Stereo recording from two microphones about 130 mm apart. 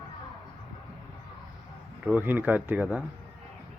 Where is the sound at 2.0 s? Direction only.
10° right (ahead or behind).